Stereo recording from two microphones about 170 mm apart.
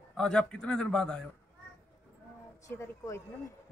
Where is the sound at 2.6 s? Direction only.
15° left (ahead or behind).